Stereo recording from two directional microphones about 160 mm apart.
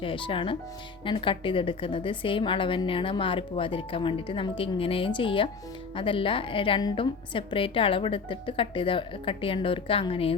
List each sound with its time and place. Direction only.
0.0 s a woman's voice: 35° left (ahead or behind)